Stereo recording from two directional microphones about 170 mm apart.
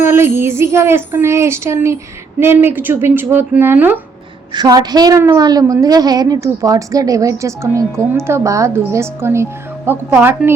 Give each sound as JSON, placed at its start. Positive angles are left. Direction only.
{"t": 0.0, "sound": "music", "side_deg": -15}
{"t": 4.5, "sound": "a woman's voice", "side_deg": -25}